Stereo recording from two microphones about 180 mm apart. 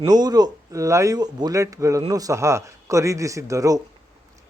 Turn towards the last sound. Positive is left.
turn(degrees=-20)  # may be behind; listen again after turning